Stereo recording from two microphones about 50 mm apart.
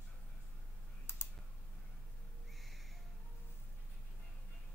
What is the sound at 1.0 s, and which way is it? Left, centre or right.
Typing, left.